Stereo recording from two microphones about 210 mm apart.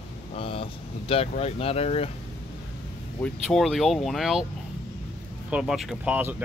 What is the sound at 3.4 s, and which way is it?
Speech, centre (ahead or behind).